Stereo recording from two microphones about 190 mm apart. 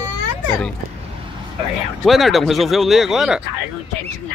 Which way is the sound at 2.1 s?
Centre (ahead or behind).